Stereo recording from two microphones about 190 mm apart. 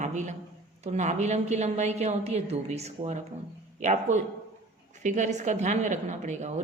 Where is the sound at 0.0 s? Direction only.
40° right (ahead or behind).